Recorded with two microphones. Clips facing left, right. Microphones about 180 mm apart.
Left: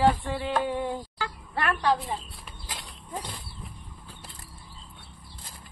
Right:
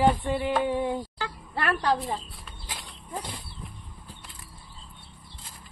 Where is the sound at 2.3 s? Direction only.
Centre (ahead or behind).